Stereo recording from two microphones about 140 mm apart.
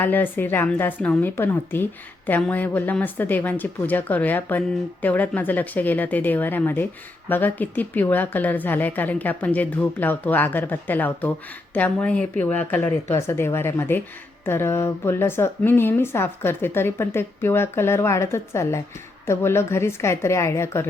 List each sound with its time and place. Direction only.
0.0 s a woman's voice: 15° left (ahead or behind)